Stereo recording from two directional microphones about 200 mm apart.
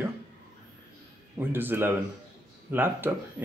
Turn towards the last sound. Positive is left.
turn(degrees=-10)  # may be behind; listen again after turning